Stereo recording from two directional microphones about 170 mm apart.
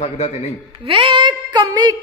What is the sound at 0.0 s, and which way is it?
Speech, 40° left (ahead or behind).